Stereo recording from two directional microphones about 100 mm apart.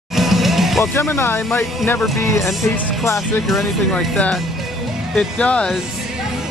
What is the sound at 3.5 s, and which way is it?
Speech, 5° left (ahead or behind).